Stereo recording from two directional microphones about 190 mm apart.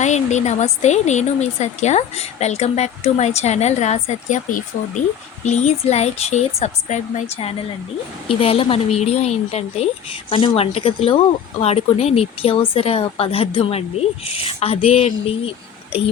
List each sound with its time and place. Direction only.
0.0 s a woman's voice: 40° left (ahead or behind)